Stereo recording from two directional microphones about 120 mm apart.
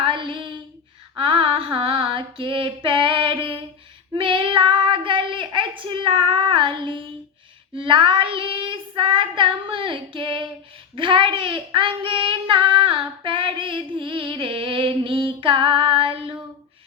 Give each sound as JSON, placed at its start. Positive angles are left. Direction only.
{"t": 0.0, "sound": "a sound", "side_deg": -45}
{"t": 1.1, "sound": "female singing", "side_deg": -50}
{"t": 4.1, "sound": "child singing", "side_deg": -45}